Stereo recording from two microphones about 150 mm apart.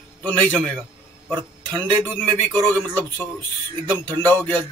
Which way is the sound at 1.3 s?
25° right (ahead or behind).